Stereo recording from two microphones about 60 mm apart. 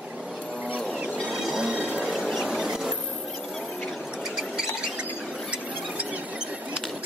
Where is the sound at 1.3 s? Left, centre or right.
Centre.